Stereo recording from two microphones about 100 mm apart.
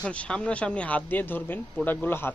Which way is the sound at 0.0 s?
10° left (ahead or behind).